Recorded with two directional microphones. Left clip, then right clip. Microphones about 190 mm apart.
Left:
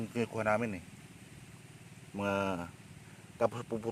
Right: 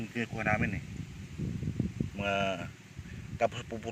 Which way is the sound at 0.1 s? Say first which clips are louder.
Even; 20° left (ahead or behind).